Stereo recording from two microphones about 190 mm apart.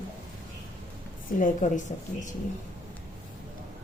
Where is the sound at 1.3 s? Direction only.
45° left (ahead or behind).